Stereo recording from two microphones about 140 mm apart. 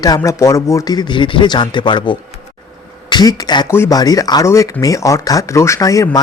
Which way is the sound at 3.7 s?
15° left (ahead or behind).